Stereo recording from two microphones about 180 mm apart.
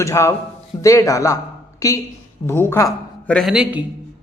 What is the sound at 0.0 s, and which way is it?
Speech, 15° left (ahead or behind).